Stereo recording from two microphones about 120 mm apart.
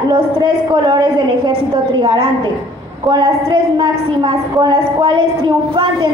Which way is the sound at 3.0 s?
40° right (ahead or behind).